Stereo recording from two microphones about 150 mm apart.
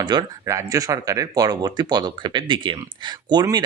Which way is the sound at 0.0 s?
30° right (ahead or behind).